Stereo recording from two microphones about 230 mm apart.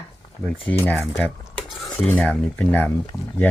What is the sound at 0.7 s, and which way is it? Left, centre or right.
Cutlery, centre.